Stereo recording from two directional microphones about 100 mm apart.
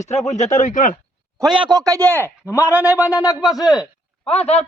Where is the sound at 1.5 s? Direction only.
50° right (ahead or behind).